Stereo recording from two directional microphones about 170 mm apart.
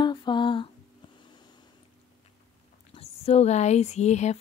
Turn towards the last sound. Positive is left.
turn(degrees=40)  # may be behind; listen again after turning